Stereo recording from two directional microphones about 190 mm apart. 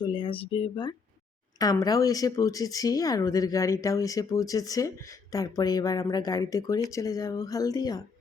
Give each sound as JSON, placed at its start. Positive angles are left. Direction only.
{"t": 0.0, "sound": "speech", "side_deg": 25}